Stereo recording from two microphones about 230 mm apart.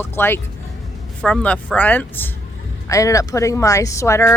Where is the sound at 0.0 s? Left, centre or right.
Centre.